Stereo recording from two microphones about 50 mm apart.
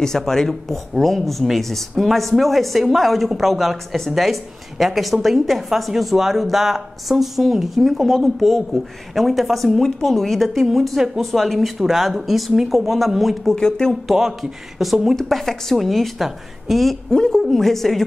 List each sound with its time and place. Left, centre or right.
0.0 s a woman's voice: centre
13.6 s speech: centre
14.0 s a woman's voice: centre
17.1 s a woman's voice: centre